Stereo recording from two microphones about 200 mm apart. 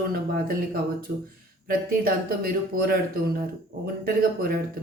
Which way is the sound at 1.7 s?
50° right (ahead or behind).